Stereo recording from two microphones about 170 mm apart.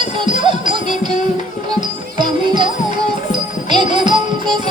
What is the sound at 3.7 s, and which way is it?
Music, 25° right (ahead or behind).